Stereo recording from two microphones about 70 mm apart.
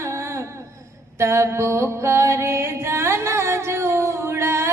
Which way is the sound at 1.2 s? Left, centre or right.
Right.